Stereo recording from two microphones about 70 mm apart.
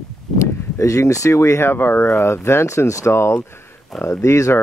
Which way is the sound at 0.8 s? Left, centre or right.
Left.